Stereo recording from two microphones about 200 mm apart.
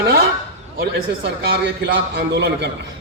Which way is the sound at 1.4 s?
55° right (ahead or behind).